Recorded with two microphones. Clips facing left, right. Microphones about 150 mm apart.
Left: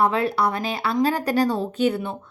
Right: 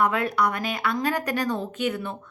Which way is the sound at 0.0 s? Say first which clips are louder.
Left 2 dB; 30° left (ahead or behind).